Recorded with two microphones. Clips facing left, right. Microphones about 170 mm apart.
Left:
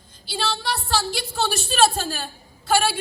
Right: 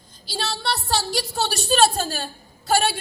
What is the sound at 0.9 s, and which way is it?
Speech, 40° right (ahead or behind).